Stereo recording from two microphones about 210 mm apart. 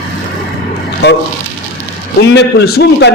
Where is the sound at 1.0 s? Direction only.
50° left (ahead or behind).